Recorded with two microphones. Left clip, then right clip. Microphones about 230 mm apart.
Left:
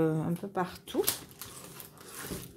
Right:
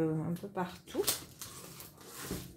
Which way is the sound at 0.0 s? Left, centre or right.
Left.